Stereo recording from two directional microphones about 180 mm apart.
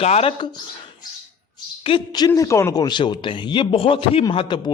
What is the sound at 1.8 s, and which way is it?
Speech, 25° left (ahead or behind).